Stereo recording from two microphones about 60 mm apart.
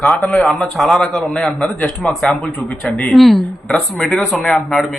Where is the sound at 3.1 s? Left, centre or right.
Centre.